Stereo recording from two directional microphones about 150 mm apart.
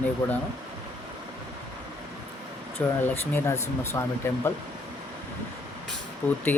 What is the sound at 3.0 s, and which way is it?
Speech, 15° left (ahead or behind).